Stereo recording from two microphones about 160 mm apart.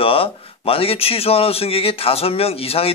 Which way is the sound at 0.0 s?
35° left (ahead or behind).